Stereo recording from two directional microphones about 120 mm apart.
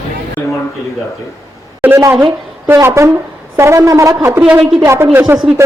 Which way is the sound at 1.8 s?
20° right (ahead or behind).